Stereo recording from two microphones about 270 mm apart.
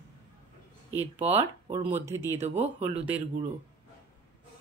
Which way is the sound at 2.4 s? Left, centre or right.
Right.